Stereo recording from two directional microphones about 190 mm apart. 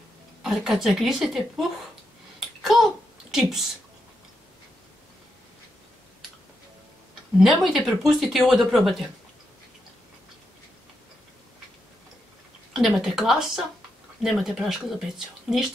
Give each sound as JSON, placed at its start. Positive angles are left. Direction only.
{"t": 0.4, "sound": "speech", "side_deg": 0}
{"t": 2.6, "sound": "a sound", "side_deg": 0}
{"t": 7.3, "sound": "speech", "side_deg": 0}
{"t": 12.7, "sound": "speech", "side_deg": 0}